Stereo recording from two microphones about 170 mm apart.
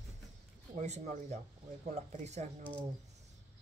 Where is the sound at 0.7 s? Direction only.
45° right (ahead or behind).